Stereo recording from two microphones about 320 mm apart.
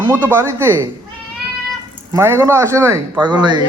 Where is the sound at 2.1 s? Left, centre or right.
Centre.